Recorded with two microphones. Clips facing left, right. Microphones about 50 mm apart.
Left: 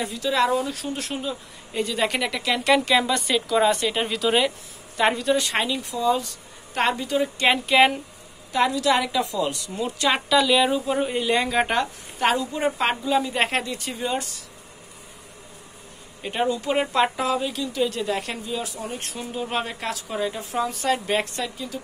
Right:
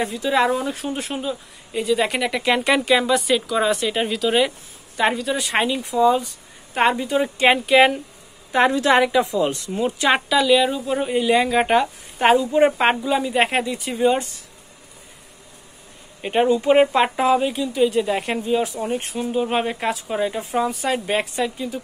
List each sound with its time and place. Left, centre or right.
0.1 s speech: centre
1.7 s speech: centre
2.4 s speech: right
7.6 s speech: centre
8.5 s a woman's voice: right
9.0 s speech: right
10.3 s speech: centre
12.2 s speech: right
13.1 s speech: centre
14.0 s speech: right
16.2 s speech: right